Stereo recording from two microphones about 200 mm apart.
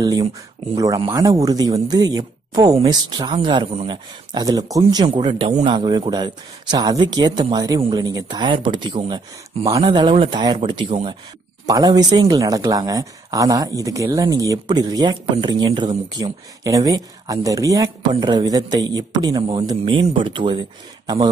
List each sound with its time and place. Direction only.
0.0 s speech: 20° right (ahead or behind)